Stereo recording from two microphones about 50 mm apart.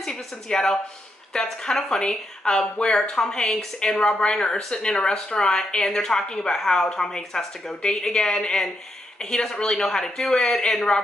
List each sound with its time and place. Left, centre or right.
0.0 s speech: centre